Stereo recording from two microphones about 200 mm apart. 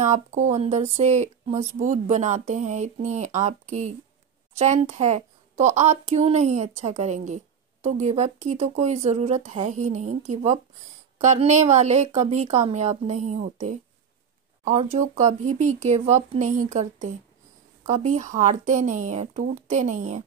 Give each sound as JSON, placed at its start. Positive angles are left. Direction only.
{"t": 0.0, "sound": "speech", "side_deg": -35}